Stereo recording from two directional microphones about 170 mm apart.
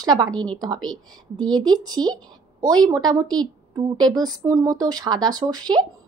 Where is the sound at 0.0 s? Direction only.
25° right (ahead or behind).